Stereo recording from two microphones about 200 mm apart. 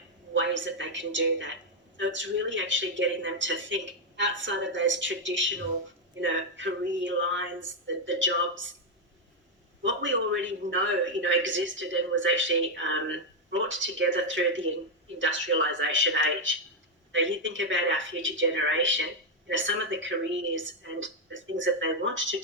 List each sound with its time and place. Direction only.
0.3 s a man's voice: 65° right (ahead or behind)
9.8 s a man's voice: 70° right (ahead or behind)